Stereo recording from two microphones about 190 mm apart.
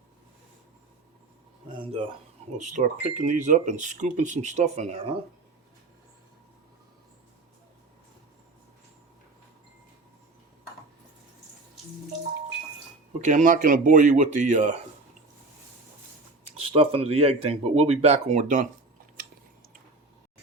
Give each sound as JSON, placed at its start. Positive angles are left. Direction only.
{"t": 1.7, "sound": "a sound", "side_deg": -30}
{"t": 2.5, "sound": "speech", "side_deg": -40}
{"t": 13.2, "sound": "speech", "side_deg": -40}
{"t": 16.6, "sound": "speech", "side_deg": -30}